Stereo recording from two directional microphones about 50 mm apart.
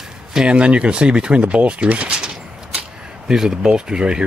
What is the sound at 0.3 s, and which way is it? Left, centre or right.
Speech, centre.